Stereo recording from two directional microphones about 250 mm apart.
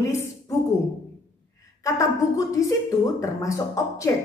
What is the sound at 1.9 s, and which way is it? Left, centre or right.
A woman's voice, centre.